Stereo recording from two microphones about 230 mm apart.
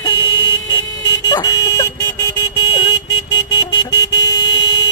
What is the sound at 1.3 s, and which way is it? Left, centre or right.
Car alarm, centre.